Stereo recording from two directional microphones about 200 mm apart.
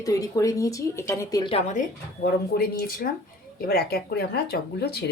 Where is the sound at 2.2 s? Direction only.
50° left (ahead or behind).